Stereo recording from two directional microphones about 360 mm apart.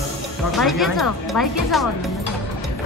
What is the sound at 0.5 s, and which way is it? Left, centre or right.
Speech, centre.